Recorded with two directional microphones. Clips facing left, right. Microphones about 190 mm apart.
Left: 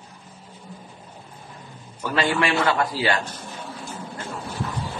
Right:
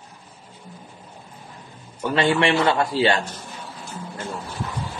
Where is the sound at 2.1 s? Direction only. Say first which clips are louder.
Right 3 dB; 25° right (ahead or behind).